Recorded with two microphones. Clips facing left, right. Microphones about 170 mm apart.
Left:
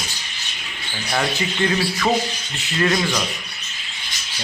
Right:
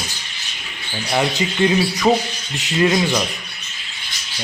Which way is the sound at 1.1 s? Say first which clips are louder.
Right 3 dB; 15° right (ahead or behind).